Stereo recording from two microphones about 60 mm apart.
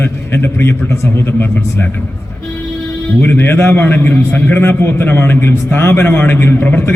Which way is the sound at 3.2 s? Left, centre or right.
Left.